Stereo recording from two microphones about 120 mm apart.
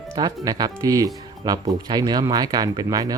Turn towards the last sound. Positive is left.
turn(degrees=-30)  # may be behind; listen again after turning